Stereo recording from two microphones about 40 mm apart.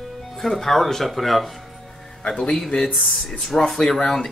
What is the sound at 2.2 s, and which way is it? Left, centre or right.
Speech, left.